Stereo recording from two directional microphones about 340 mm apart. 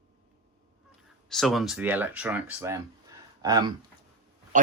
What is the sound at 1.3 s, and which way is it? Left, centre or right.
Speech, centre.